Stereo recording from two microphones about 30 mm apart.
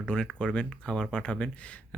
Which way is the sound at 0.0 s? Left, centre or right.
Left.